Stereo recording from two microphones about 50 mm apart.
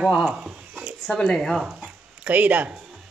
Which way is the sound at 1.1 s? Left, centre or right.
Centre.